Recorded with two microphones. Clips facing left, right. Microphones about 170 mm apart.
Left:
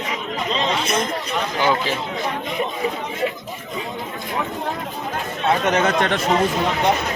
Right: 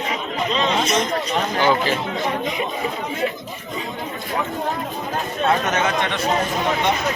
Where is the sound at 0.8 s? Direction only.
55° left (ahead or behind).